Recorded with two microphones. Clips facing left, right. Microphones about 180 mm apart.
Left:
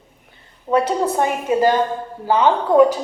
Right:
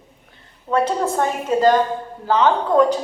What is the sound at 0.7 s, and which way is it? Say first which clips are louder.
A woman's voice: left 2 dB; 15° left (ahead or behind).